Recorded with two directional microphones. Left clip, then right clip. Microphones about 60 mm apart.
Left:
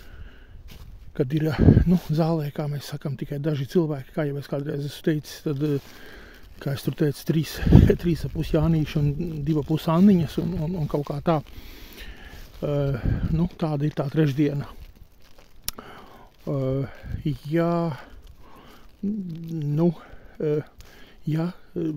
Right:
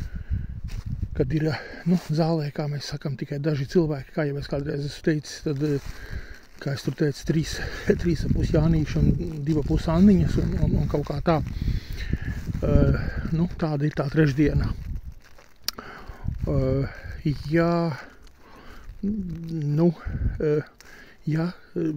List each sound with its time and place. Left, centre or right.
1.1 s speech: left
1.7 s speech: left
2.2 s speech: left
6.6 s speech: left
8.6 s speech: left
10.7 s speech: left
11.1 s speech: centre
15.6 s a sound: centre
16.4 s speech: centre
19.0 s a sound: centre
19.4 s speech: centre